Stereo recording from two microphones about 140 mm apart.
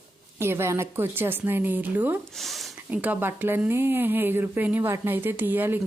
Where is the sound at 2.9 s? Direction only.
10° right (ahead or behind).